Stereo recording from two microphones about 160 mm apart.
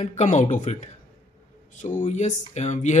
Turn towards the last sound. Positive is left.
turn(degrees=45)  # may be behind; listen again after turning